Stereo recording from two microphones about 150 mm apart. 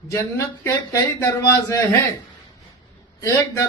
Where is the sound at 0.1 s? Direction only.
20° left (ahead or behind).